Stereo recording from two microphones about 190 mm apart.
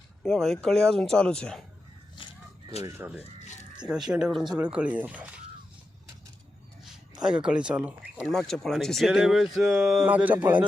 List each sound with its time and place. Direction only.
0.2 s speech: centre (ahead or behind)
2.1 s a sound: 30° left (ahead or behind)
2.8 s speech: 10° right (ahead or behind)
3.2 s a sound: 35° left (ahead or behind)
3.8 s speech: 5° right (ahead or behind)
7.3 s speech: 5° right (ahead or behind)